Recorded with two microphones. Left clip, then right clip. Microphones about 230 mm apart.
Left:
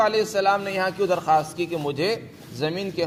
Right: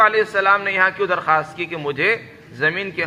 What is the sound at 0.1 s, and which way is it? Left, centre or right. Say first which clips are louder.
Speech: right 5 dB; left.